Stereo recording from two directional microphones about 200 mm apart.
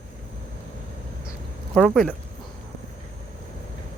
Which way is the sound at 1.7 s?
Centre (ahead or behind).